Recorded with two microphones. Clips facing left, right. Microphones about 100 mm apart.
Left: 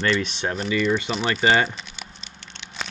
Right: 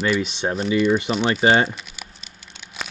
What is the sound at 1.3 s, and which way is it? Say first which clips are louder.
Speech: right 2 dB; 25° right (ahead or behind).